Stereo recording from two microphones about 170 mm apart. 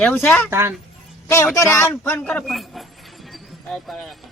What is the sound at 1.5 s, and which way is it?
A man's voice, 15° left (ahead or behind).